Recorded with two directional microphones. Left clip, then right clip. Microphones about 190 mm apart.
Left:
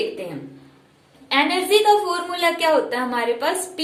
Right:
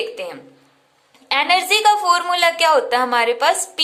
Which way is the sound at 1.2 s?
45° right (ahead or behind).